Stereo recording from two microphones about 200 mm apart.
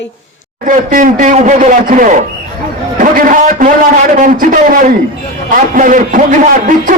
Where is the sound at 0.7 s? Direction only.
40° right (ahead or behind).